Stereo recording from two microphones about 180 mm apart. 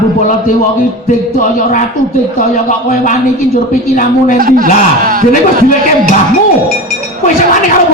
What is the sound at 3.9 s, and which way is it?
A man's voice, 45° left (ahead or behind).